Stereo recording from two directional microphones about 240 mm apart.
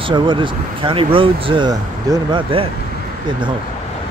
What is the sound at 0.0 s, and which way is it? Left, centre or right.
Speech, centre.